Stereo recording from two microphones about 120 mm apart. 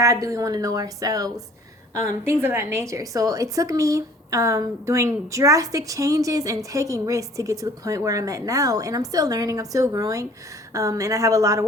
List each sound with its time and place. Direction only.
0.0 s a woman's voice: 30° right (ahead or behind)